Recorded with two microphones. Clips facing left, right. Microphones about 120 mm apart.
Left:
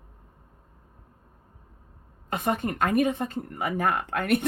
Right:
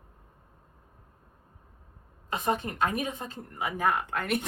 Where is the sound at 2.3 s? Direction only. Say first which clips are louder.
Left 2 dB; 60° left (ahead or behind).